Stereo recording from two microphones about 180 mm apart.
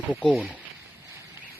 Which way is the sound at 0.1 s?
5° left (ahead or behind).